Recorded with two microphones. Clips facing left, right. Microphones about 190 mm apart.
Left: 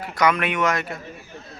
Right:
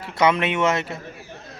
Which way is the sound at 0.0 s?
25° right (ahead or behind).